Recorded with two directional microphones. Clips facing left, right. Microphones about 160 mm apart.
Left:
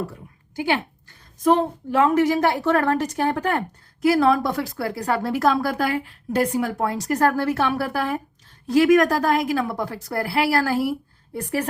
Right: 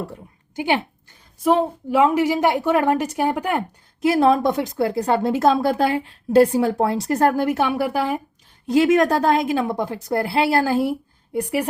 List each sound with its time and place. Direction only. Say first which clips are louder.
0.5 s a sound: right 2 dB; 20° right (ahead or behind)
1.5 s a woman's voice: right 1 dB; 5° right (ahead or behind)
4.0 s a woman's voice: right 2 dB; 25° right (ahead or behind)
11.3 s a woman's voice: right 3 dB; 15° right (ahead or behind)